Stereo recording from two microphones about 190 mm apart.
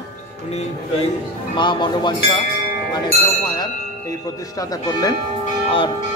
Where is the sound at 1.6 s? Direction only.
25° left (ahead or behind).